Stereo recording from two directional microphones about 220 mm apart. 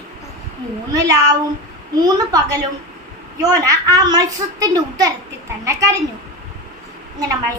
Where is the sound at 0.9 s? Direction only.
15° right (ahead or behind).